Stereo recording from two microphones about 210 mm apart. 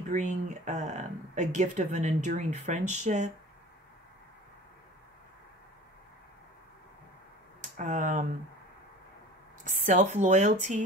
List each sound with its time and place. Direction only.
0.1 s speech: 35° right (ahead or behind)
7.7 s speech: 40° right (ahead or behind)
9.7 s speech: 35° right (ahead or behind)